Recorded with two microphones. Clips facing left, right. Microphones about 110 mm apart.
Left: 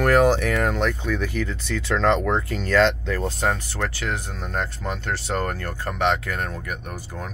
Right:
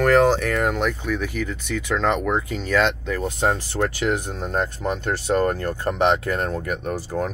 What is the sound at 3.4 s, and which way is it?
Speech, 30° right (ahead or behind).